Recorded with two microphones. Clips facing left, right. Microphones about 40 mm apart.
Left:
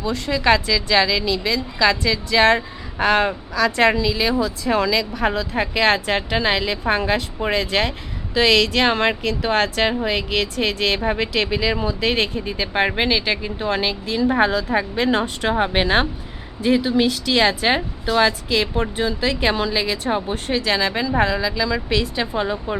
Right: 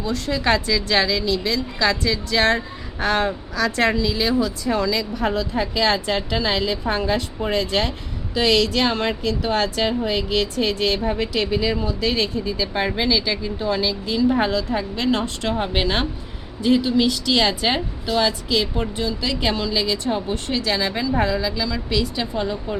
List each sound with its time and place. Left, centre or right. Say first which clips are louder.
0.0 s a woman's voice: left 2 dB; centre
4.7 s a woman's voice: left 4 dB; left
11.2 s speech: left 1 dB; left
11.7 s a woman's voice: left 2 dB; left
14.2 s speech: left 1 dB; left
21.4 s a woman's voice: left 2 dB; centre
21.7 s speech: left 2 dB; left